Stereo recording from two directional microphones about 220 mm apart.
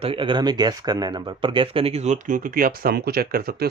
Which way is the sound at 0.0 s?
25° right (ahead or behind).